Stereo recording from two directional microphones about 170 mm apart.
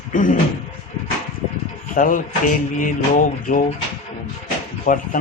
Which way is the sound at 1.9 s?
50° left (ahead or behind).